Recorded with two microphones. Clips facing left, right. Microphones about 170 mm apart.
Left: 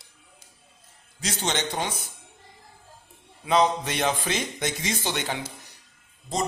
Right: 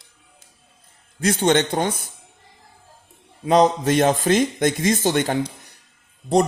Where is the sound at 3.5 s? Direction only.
45° right (ahead or behind).